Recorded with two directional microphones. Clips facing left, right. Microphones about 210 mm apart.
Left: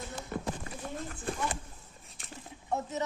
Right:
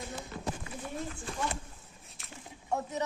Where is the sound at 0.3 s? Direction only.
55° left (ahead or behind).